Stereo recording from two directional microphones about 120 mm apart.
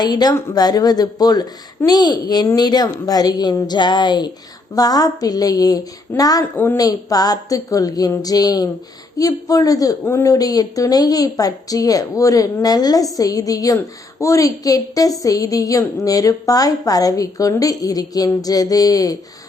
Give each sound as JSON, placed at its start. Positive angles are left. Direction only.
{"t": 0.0, "sound": "a woman's voice", "side_deg": 35}